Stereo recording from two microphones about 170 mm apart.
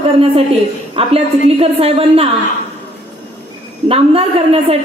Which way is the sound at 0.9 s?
35° right (ahead or behind).